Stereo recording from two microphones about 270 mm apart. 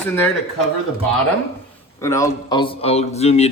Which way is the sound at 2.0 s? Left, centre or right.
Centre.